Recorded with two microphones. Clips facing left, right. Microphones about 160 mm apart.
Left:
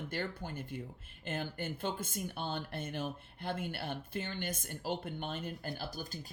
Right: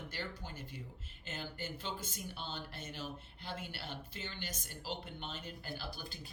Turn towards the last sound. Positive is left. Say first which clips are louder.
# left 4 dB
turn(degrees=45)  # may be behind; listen again after turning